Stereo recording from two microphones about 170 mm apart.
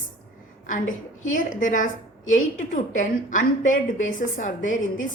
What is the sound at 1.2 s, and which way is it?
A woman's voice, 50° left (ahead or behind).